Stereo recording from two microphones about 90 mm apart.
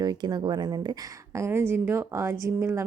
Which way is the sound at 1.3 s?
30° right (ahead or behind).